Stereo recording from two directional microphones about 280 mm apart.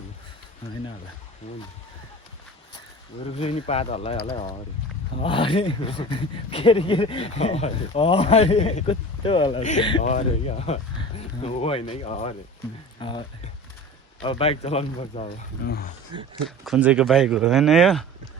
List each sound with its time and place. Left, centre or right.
3.2 s speech: left
5.2 s speech: centre; by 15.9 s left
16.6 s speech: centre